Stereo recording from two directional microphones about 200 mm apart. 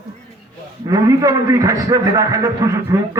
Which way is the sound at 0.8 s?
20° right (ahead or behind).